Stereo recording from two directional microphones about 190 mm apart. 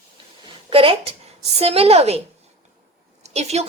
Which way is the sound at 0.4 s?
30° right (ahead or behind).